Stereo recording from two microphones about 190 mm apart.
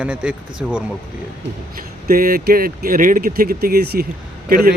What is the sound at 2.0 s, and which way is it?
Speech, 50° right (ahead or behind).